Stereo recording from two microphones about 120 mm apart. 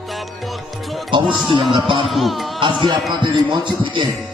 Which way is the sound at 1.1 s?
45° right (ahead or behind).